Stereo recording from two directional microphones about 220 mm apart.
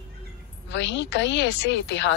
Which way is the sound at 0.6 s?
55° left (ahead or behind).